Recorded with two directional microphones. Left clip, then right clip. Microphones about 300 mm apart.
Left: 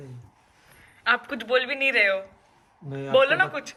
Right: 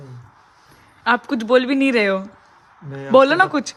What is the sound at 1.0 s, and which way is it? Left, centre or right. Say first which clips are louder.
Speech: right 6 dB; centre.